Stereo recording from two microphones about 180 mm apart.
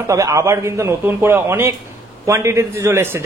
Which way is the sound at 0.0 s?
15° right (ahead or behind).